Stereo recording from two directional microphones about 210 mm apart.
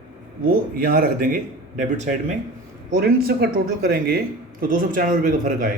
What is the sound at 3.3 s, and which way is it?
Speech, 45° right (ahead or behind).